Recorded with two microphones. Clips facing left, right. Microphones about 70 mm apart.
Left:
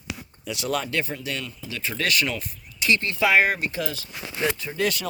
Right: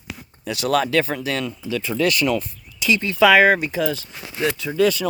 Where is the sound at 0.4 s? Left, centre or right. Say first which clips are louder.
Right 7 dB; right.